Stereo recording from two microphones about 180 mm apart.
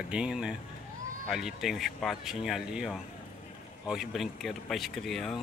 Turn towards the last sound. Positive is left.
turn(degrees=0)  # may be behind; listen again after turning